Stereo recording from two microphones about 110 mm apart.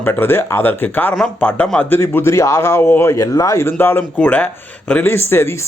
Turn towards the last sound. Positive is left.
turn(degrees=20)  # may be behind; listen again after turning